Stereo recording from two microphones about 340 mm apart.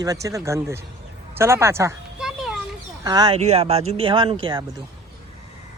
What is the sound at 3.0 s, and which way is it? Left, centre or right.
Speech, centre.